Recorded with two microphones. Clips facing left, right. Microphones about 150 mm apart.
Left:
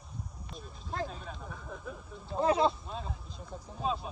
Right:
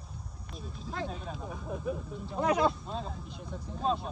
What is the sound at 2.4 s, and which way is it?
Speech, 30° left (ahead or behind).